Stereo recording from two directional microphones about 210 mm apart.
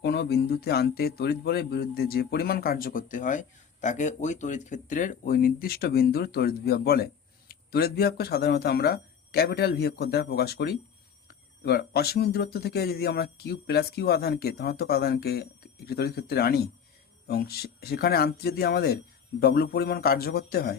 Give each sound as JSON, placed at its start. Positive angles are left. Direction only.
{"t": 0.0, "sound": "speech", "side_deg": 55}